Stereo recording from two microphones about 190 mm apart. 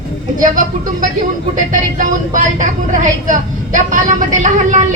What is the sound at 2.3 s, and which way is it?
Speech, 40° right (ahead or behind).